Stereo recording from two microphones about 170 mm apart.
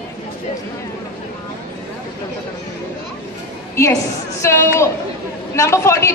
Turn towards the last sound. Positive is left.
turn(degrees=15)  # may be behind; listen again after turning